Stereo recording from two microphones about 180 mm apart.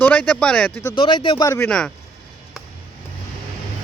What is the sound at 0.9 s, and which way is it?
Speech, 25° left (ahead or behind).